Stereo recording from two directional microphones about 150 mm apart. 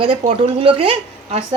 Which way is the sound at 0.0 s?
35° right (ahead or behind).